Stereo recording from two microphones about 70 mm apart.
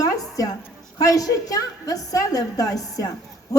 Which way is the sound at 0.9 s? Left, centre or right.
Left.